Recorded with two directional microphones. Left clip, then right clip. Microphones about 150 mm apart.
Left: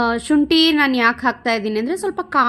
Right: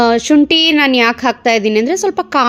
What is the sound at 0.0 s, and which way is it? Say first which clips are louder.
Speech: right 7 dB; 30° right (ahead or behind).